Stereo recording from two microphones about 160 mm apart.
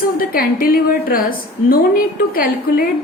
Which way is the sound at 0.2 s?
65° left (ahead or behind).